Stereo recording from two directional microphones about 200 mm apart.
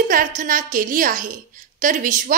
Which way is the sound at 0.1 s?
45° right (ahead or behind).